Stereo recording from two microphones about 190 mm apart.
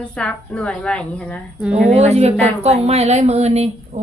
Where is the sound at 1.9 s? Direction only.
35° right (ahead or behind).